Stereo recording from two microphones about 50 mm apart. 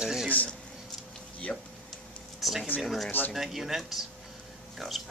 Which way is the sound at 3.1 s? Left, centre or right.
Left.